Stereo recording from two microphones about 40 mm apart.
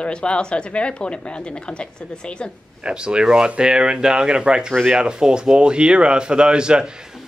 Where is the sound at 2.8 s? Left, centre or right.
Right.